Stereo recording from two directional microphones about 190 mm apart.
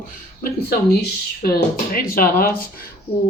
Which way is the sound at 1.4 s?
50° left (ahead or behind).